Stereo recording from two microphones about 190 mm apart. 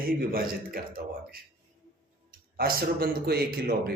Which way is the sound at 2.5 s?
55° right (ahead or behind).